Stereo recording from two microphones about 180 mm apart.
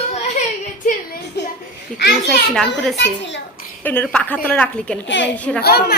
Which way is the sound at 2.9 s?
80° left.